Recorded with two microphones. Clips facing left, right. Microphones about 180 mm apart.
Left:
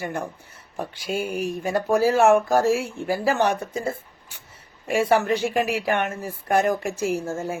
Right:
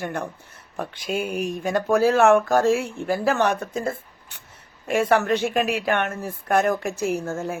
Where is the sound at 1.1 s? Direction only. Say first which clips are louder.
Right 1 dB; 60° right (ahead or behind).